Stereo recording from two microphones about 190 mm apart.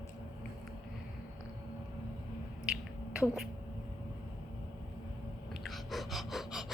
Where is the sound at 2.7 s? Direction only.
5° right (ahead or behind).